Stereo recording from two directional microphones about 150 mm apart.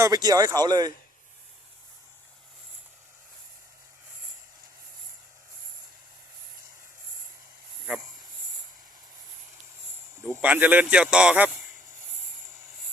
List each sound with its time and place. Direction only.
0.0 s speech: 25° right (ahead or behind)
10.4 s speech: 10° right (ahead or behind)